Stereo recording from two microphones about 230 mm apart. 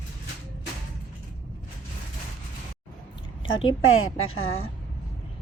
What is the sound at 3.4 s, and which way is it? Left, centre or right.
A woman's voice, left.